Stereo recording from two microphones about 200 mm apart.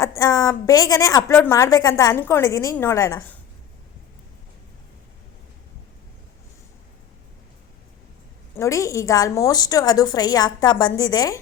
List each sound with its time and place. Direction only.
0.0 s a woman's voice: 15° left (ahead or behind)
8.5 s a woman's voice: 15° left (ahead or behind)